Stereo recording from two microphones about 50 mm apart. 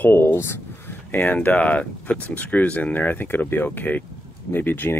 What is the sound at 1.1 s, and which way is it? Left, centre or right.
Speech, left.